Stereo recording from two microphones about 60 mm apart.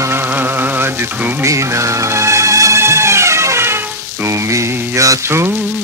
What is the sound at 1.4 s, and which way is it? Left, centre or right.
Music, right.